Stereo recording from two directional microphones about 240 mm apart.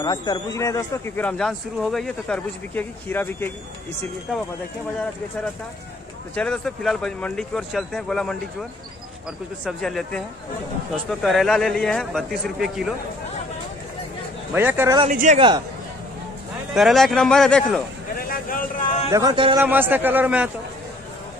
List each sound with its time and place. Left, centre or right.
0.0 s speech: centre
6.3 s speech: centre
9.7 s speech: centre
14.5 s a man's voice: centre
15.0 s speech: right
16.7 s speech: centre
18.5 s a man's voice: left
19.1 s a man's voice: centre
19.6 s a man's voice: centre